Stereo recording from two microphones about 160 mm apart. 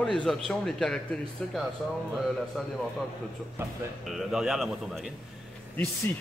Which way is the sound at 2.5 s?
Centre (ahead or behind).